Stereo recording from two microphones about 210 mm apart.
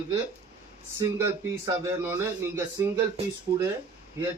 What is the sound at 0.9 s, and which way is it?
A man's voice, 15° right (ahead or behind).